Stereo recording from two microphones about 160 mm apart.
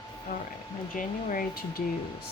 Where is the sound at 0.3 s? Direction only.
60° left (ahead or behind).